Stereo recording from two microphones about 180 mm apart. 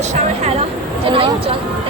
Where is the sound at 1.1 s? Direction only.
30° right (ahead or behind).